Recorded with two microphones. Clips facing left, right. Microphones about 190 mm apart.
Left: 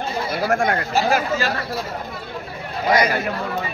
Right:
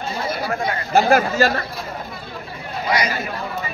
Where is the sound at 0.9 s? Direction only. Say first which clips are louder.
Right 7 dB; 50° right (ahead or behind).